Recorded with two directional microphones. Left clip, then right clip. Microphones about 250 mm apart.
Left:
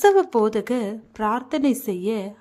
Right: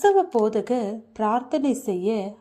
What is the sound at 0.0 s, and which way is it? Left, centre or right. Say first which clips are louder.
A woman's voice: left 2 dB; centre.